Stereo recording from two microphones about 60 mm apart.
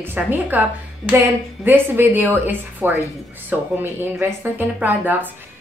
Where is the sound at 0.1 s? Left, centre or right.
Right.